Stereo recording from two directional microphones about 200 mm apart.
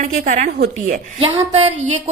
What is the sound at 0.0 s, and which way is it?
A woman's voice, 35° right (ahead or behind).